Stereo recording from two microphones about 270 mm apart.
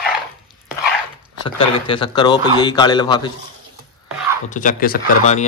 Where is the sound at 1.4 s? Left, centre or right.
Centre.